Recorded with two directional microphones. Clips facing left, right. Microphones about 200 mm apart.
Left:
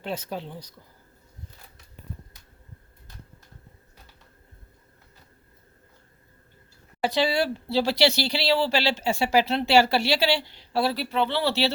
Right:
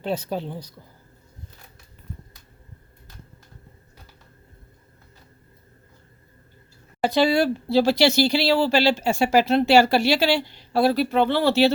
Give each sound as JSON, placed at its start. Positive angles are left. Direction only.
{"t": 0.0, "sound": "a woman's voice", "side_deg": -35}
{"t": 7.0, "sound": "speech", "side_deg": -50}